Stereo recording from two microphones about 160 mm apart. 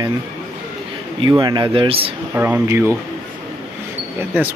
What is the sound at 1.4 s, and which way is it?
Speech, 25° right (ahead or behind).